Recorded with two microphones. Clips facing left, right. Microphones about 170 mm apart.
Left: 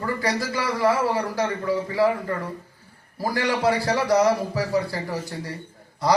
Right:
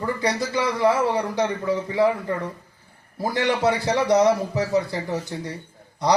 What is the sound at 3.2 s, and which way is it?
Speech, 20° right (ahead or behind).